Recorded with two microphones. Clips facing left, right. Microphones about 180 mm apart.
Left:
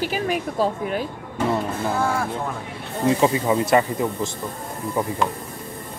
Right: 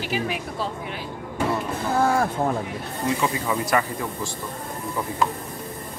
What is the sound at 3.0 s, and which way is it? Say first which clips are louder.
Speech: left 6 dB; 30° left (ahead or behind).